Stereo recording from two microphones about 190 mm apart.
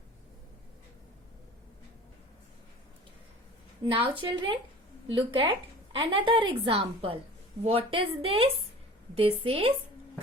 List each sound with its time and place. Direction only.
3.8 s a woman's voice: 25° right (ahead or behind)